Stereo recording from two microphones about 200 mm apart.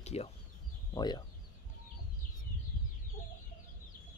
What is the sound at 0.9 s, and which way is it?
Speech, 20° left (ahead or behind).